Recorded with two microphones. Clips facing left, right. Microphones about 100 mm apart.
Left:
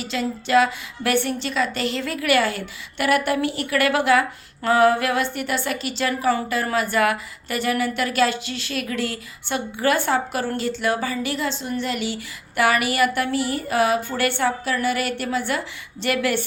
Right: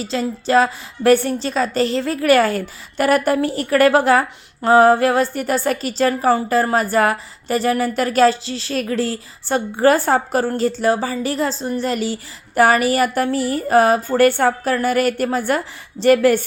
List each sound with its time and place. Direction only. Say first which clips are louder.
0.0 s a woman's voice: right 4 dB; 35° right (ahead or behind)